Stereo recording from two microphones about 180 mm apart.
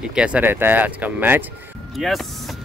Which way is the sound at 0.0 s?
5° right (ahead or behind).